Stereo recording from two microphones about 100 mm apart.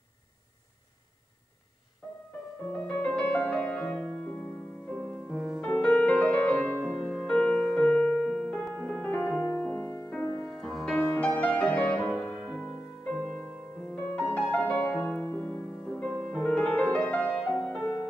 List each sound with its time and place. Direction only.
2.7 s music: 15° left (ahead or behind)
5.6 s music: 15° left (ahead or behind)
10.5 s music: centre (ahead or behind)
11.1 s music: 15° left (ahead or behind)